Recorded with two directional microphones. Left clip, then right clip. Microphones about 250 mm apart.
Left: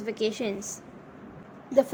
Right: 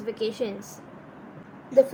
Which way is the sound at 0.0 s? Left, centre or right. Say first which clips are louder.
Even; left.